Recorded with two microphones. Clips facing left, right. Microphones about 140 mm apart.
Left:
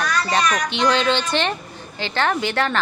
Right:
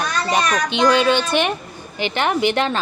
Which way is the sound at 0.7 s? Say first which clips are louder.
Right 3 dB; 15° right (ahead or behind).